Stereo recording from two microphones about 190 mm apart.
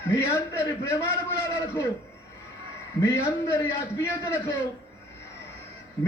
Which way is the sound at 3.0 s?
15° left (ahead or behind).